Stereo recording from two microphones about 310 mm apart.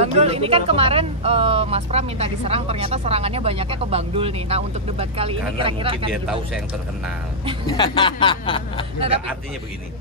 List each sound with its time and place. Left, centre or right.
0.0 s speech: centre
7.6 s speech: centre